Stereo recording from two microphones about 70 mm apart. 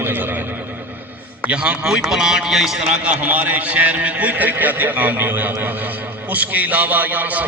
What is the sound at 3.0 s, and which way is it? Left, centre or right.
A man's voice, right.